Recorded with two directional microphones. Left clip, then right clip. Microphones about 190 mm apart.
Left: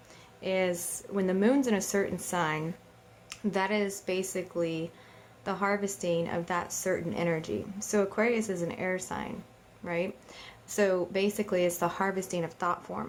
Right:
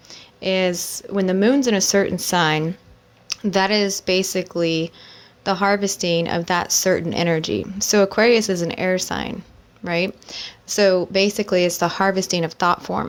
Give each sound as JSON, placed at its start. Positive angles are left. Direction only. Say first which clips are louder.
{"t": 0.1, "sound": "a woman's voice", "louder": "right 10 dB", "side_deg": -30}